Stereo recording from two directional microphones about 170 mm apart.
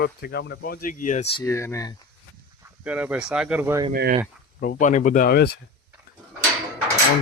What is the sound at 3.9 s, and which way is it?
Speech, 60° right (ahead or behind).